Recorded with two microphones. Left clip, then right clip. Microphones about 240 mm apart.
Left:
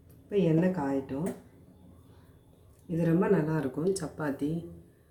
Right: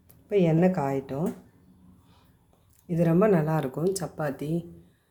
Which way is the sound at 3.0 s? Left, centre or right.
Right.